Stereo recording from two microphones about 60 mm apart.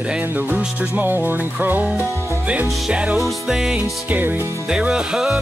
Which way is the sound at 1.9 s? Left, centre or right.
Centre.